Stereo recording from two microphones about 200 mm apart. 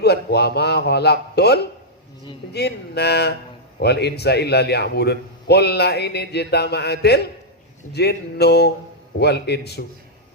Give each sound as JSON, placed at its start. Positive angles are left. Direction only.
{"t": 0.0, "sound": "a man's voice", "side_deg": 55}